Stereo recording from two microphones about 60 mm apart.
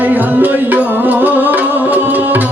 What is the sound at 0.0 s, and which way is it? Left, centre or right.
Music, right.